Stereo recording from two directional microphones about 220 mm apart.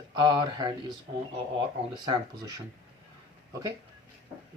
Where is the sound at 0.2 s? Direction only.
20° right (ahead or behind).